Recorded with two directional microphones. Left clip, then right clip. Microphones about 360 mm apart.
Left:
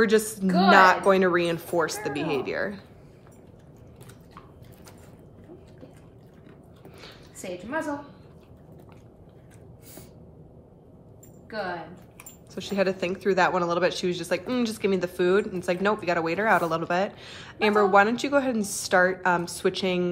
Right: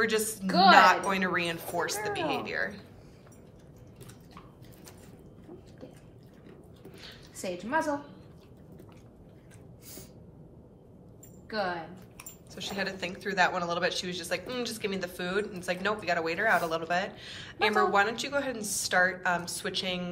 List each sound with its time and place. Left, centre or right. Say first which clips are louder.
0.0 s a man's voice: left 6 dB; centre
7.4 s a woman's voice: right 1 dB; centre
12.5 s a man's voice: left 8 dB; centre